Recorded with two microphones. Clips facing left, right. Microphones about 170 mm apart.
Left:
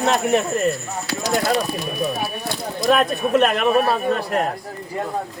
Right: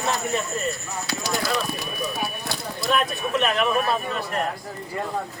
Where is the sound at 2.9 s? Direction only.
60° left (ahead or behind).